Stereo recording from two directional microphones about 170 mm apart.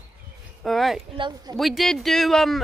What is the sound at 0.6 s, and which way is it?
Speech, centre (ahead or behind).